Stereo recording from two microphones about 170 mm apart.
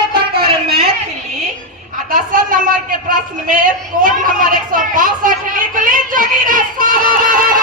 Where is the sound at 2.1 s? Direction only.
50° right (ahead or behind).